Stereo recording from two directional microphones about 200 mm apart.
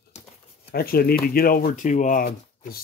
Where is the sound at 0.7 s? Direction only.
50° left (ahead or behind).